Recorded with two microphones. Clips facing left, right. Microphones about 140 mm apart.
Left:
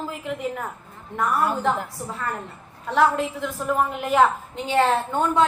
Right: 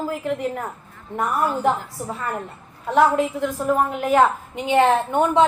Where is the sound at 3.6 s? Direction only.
Centre (ahead or behind).